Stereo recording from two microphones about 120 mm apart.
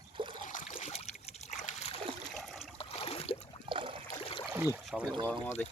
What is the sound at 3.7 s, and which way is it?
Boat, 45° right (ahead or behind).